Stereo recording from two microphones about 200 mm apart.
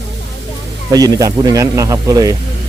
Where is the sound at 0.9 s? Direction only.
20° right (ahead or behind).